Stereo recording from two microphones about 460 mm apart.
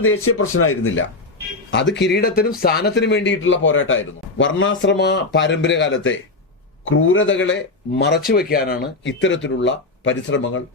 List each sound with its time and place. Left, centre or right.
0.0 s speech: left